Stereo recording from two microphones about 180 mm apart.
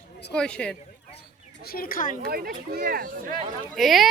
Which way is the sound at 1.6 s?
55° left (ahead or behind).